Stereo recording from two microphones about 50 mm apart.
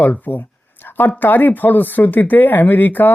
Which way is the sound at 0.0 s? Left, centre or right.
Left.